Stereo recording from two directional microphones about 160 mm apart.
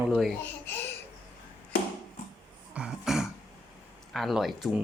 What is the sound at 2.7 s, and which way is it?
Music, 5° right (ahead or behind).